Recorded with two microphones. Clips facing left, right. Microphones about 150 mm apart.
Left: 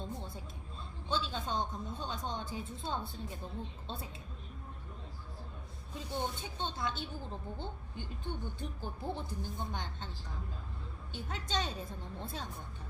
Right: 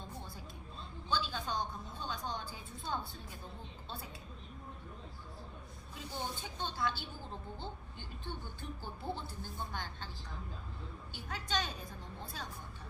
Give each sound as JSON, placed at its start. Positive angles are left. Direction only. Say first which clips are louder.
{"t": 1.0, "sound": "a sound", "louder": "left 1 dB", "side_deg": 25}
{"t": 2.0, "sound": "a woman's voice", "louder": "right 1 dB", "side_deg": 25}
{"t": 6.6, "sound": "a woman's voice", "louder": "even", "side_deg": 20}
{"t": 11.1, "sound": "a woman's voice", "louder": "left 1 dB", "side_deg": 25}